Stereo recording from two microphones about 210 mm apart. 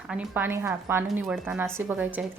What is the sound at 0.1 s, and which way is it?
Speech, 5° right (ahead or behind).